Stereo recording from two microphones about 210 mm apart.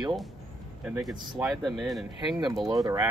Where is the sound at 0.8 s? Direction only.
5° right (ahead or behind).